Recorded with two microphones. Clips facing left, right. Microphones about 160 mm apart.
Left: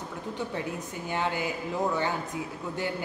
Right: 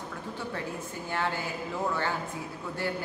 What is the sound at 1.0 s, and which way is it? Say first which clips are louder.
Speech: left 3 dB; 15° left (ahead or behind).